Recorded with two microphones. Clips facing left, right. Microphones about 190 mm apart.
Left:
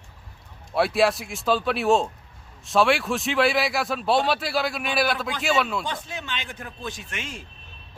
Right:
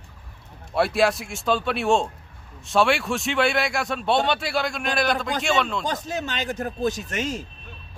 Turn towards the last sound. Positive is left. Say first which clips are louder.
# right 8 dB
turn(degrees=-40)  # may be behind; listen again after turning